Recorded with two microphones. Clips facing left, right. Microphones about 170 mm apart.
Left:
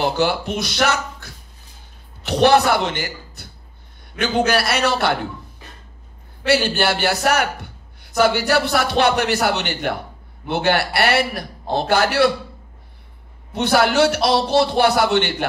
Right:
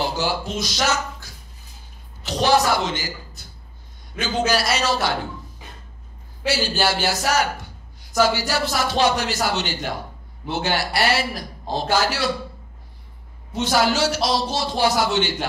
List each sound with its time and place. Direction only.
0.0 s a man's voice: 60° left (ahead or behind)
6.4 s a man's voice: 60° left (ahead or behind)
13.5 s a man's voice: 60° left (ahead or behind)